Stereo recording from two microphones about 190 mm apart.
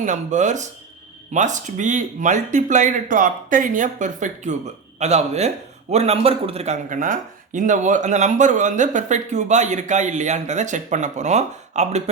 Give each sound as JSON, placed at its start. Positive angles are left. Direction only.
{"t": 0.0, "sound": "speech", "side_deg": -40}